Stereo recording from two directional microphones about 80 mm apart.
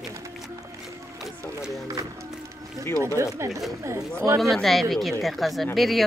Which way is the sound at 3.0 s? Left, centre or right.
Right.